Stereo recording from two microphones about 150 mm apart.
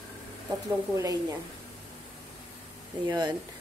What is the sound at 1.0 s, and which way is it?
Speech, 20° right (ahead or behind).